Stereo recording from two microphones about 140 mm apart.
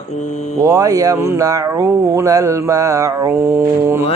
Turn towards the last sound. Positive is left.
turn(degrees=-20)  # may be behind; listen again after turning